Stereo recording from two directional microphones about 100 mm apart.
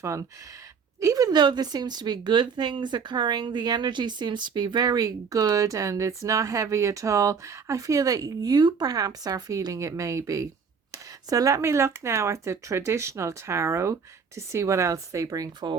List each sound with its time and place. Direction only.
0.0 s speech: 30° right (ahead or behind)